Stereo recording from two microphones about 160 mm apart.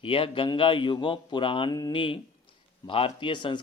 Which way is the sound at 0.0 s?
35° left (ahead or behind).